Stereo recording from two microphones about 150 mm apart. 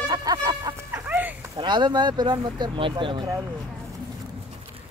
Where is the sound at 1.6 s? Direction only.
30° right (ahead or behind).